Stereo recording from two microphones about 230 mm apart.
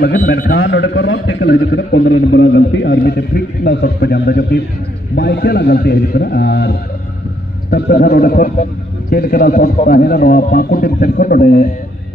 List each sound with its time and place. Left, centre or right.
0.0 s a man's voice: left